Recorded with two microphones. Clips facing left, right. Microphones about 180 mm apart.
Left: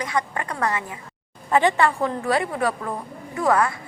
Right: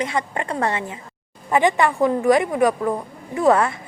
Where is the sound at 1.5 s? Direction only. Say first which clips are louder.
Right 1 dB; 15° right (ahead or behind).